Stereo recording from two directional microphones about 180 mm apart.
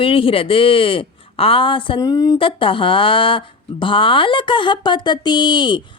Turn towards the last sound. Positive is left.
turn(degrees=25)  # may be behind; listen again after turning